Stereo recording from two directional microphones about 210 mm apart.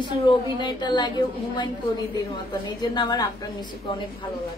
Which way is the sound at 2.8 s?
20° left (ahead or behind).